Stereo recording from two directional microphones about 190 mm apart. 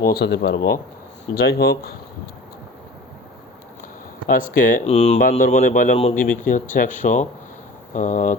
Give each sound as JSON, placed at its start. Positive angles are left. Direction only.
{"t": 0.0, "sound": "speech", "side_deg": 55}
{"t": 4.3, "sound": "speech", "side_deg": 45}